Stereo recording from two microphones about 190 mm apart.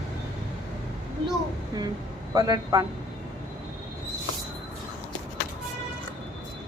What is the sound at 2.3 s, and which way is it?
Speech, 20° right (ahead or behind).